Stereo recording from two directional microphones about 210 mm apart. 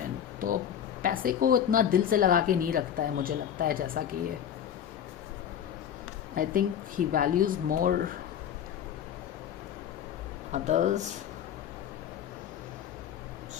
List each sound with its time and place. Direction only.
0.3 s a sound: 40° right (ahead or behind)
1.0 s speech: 40° right (ahead or behind)
6.3 s speech: 40° right (ahead or behind)
10.5 s speech: 35° right (ahead or behind)